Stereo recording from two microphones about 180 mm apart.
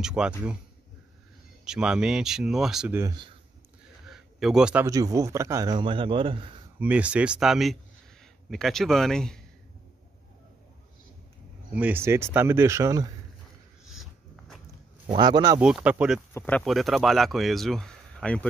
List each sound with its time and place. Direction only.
0.0 s speech: 5° right (ahead or behind)
1.6 s speech: 5° right (ahead or behind)
3.0 s a man's voice: 25° right (ahead or behind)
4.0 s a sound: centre (ahead or behind)
4.8 s a man's voice: 20° right (ahead or behind)
6.8 s speech: 5° right (ahead or behind)
11.7 s speech: 10° right (ahead or behind)
15.1 s a man's voice: 25° right (ahead or behind)
15.6 s speech: 5° right (ahead or behind)
16.3 s speech: 10° left (ahead or behind)